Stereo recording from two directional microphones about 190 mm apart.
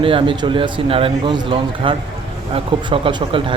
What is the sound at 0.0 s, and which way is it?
Speech, 25° right (ahead or behind).